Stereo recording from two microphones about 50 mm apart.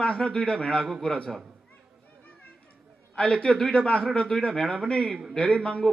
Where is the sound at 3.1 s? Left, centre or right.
Centre.